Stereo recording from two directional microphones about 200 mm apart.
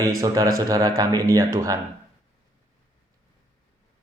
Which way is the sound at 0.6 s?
15° right (ahead or behind).